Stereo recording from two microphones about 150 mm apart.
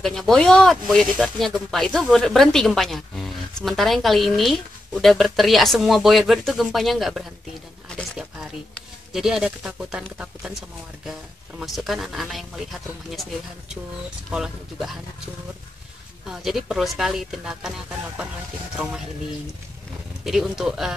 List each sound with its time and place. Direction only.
0.0 s speech: centre (ahead or behind)
8.7 s speech: centre (ahead or behind)
11.6 s speech: centre (ahead or behind)
14.3 s speech: centre (ahead or behind)
16.3 s speech: centre (ahead or behind)
20.2 s speech: centre (ahead or behind)